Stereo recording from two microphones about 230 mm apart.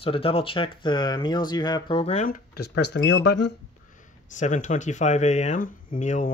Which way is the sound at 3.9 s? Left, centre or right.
Left.